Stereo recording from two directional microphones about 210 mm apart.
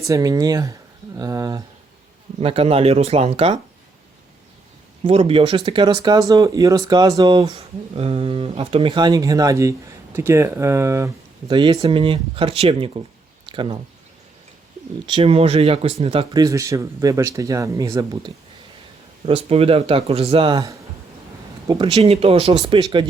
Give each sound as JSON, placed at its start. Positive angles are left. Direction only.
{"t": 0.0, "sound": "speech", "side_deg": -15}
{"t": 2.4, "sound": "speech", "side_deg": -25}
{"t": 5.0, "sound": "speech", "side_deg": -25}
{"t": 13.4, "sound": "a sound", "side_deg": -25}
{"t": 15.0, "sound": "speech", "side_deg": -25}
{"t": 19.2, "sound": "speech", "side_deg": -30}